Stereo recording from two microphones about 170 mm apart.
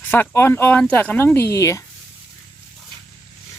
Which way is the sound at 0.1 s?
10° left (ahead or behind).